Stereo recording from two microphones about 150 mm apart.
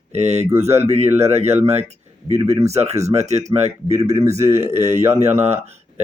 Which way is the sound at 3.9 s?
20° right (ahead or behind).